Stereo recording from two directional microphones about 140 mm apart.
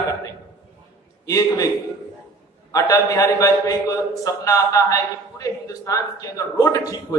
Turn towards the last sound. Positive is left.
turn(degrees=25)  # may be behind; listen again after turning